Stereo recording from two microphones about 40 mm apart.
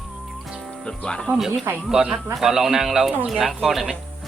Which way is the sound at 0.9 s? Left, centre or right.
Centre.